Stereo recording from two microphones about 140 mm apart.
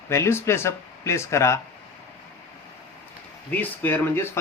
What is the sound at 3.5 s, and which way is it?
Speech, 15° left (ahead or behind).